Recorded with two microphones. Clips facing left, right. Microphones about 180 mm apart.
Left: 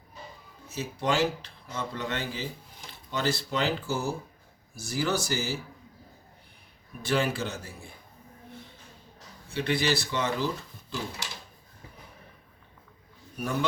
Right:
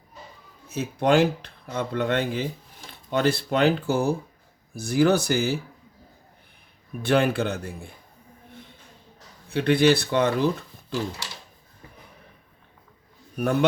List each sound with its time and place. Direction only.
0.7 s speech: 60° right (ahead or behind)
7.0 s speech: 60° right (ahead or behind)
9.5 s speech: 60° right (ahead or behind)
13.4 s speech: 65° right (ahead or behind)